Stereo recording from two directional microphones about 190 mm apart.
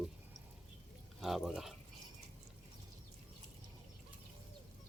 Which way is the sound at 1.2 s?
Centre (ahead or behind).